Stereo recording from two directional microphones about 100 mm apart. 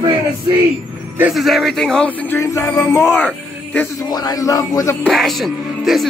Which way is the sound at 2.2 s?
30° left (ahead or behind).